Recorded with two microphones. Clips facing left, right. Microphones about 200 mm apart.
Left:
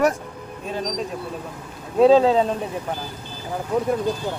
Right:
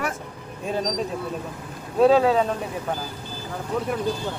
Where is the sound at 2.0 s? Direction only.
25° left (ahead or behind).